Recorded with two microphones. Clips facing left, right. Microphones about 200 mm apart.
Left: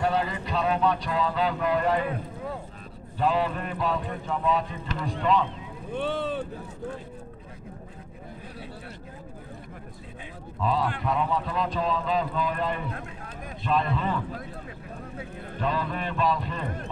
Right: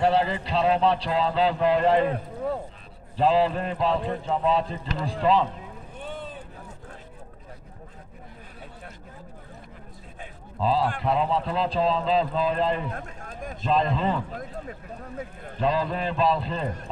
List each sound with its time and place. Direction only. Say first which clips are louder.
0.0 s speech: right 4 dB; 30° right (ahead or behind)
5.9 s vehicle: left 9 dB; 80° left
10.6 s speech: right 3 dB; 30° right (ahead or behind)
12.9 s a sound: right 1 dB; 45° right (ahead or behind)
13.7 s speech: right 3 dB; 30° right (ahead or behind)
15.6 s speech: right 4 dB; 30° right (ahead or behind)